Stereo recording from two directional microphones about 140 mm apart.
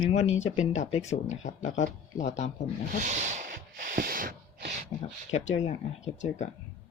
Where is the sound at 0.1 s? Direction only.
50° left (ahead or behind).